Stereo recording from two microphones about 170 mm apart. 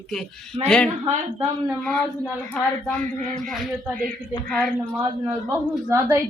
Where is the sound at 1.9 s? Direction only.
5° left (ahead or behind).